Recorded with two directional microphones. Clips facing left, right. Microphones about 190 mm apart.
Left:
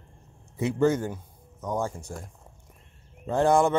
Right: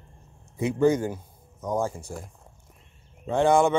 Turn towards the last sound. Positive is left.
turn(degrees=0)  # may be behind; listen again after turning